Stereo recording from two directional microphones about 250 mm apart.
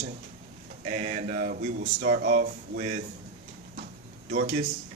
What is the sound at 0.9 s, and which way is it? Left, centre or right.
Speech, right.